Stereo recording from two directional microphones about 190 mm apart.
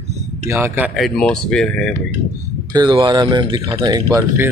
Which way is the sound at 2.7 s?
25° right (ahead or behind).